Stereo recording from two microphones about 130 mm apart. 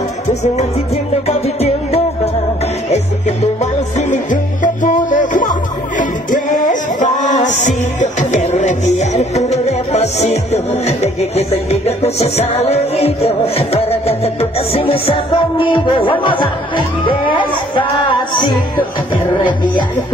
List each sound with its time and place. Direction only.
0.3 s music: 60° left (ahead or behind)
4.8 s music: 85° left; by 15.8 s 40° left (ahead or behind)
16.1 s speech: 40° left (ahead or behind)